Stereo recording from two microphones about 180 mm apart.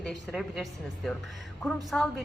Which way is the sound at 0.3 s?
Centre (ahead or behind).